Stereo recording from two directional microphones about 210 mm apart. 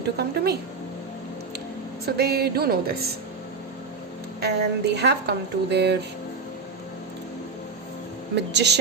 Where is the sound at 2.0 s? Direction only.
50° right (ahead or behind).